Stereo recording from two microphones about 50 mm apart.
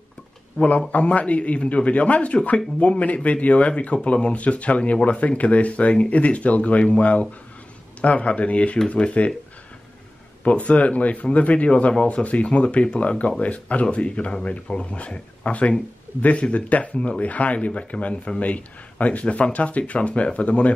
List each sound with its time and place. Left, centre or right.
0.6 s a man's voice: left
10.4 s a man's voice: left